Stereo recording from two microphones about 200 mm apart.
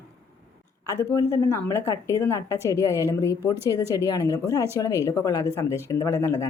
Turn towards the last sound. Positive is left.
turn(degrees=15)  # may be behind; listen again after turning